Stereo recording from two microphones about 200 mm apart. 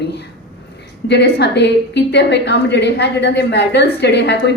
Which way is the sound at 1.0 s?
55° left (ahead or behind).